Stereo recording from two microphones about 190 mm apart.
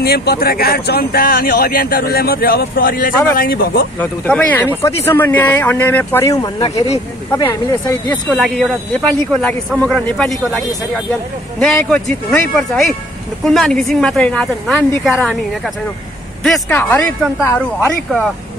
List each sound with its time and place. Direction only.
0.0 s speech: 55° left (ahead or behind)
4.0 s speech: 10° left (ahead or behind)
11.6 s speech: 5° left (ahead or behind)